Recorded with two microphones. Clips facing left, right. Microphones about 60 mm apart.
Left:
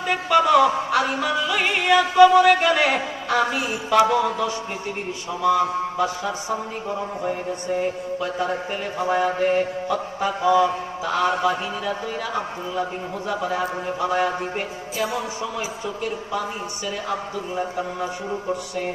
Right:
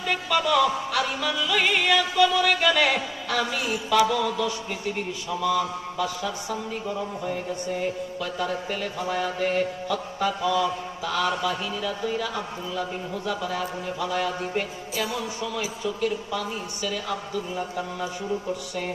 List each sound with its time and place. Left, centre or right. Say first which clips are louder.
0.0 s music: left 6 dB; left
2.1 s a sound: left 12 dB; left
5.3 s a man's voice: left 5 dB; left